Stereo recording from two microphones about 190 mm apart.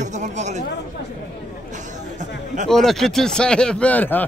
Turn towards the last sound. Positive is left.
turn(degrees=10)  # may be behind; listen again after turning